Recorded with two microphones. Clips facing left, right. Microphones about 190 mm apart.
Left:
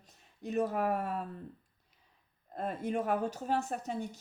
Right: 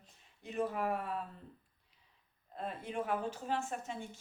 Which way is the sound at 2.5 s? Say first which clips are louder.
Left 5 dB; 45° left (ahead or behind).